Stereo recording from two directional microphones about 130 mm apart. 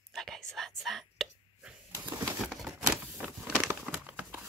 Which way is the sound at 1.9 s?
15° right (ahead or behind).